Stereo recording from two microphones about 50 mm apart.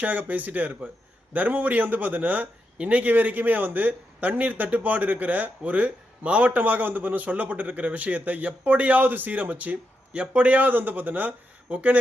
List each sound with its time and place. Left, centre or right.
0.0 s a man's voice: right